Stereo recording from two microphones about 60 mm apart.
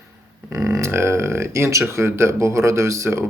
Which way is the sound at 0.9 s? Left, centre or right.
Right.